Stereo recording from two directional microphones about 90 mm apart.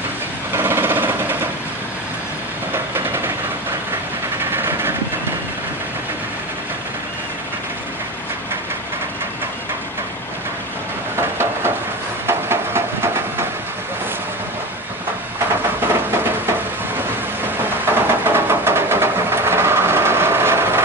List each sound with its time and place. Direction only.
0.5 s sewing machine: 25° right (ahead or behind)
4.5 s vehicle: 25° right (ahead or behind)
11.1 s a sound: 30° right (ahead or behind)
17.8 s vehicle: 25° right (ahead or behind)